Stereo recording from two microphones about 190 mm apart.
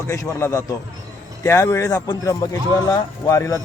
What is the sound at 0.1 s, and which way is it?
Speech, 15° left (ahead or behind).